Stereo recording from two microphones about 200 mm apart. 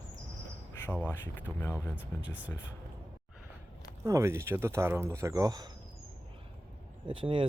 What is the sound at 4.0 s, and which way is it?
Speech, 15° right (ahead or behind).